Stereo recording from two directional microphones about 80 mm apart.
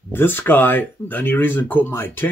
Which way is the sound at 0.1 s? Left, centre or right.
Left.